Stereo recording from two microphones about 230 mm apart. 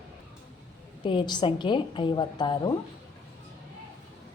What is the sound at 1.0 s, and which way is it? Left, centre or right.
A woman's voice, centre.